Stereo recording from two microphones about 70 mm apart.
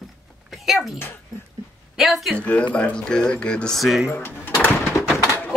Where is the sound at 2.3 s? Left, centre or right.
Left.